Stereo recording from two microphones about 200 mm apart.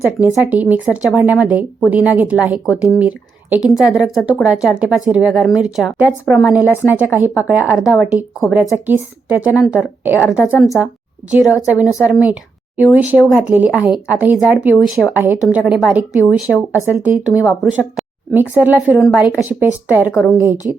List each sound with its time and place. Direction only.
0.2 s a woman's voice: 10° right (ahead or behind)
20.7 s a woman's voice: 10° right (ahead or behind)